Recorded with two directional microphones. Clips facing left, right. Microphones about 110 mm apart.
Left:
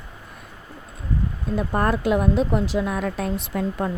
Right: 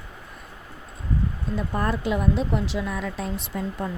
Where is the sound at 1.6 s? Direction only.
55° left (ahead or behind).